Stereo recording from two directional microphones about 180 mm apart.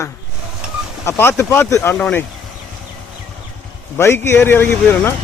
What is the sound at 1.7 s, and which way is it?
Speech, 5° left (ahead or behind).